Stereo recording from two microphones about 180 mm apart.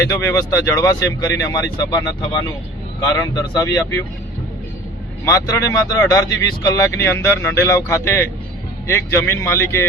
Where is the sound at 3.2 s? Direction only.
20° left (ahead or behind).